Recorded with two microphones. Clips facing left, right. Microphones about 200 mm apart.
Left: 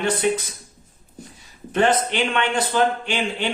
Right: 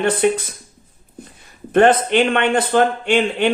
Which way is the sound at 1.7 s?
55° right (ahead or behind).